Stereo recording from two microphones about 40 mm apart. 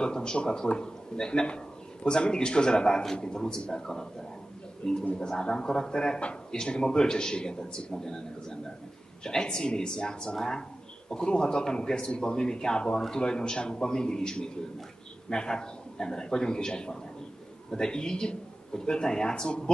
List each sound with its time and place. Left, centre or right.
0.0 s speech: left
5.1 s speech: centre